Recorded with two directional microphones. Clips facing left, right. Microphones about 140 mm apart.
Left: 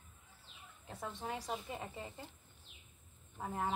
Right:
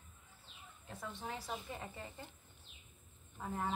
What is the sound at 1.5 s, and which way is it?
Speech, 5° left (ahead or behind).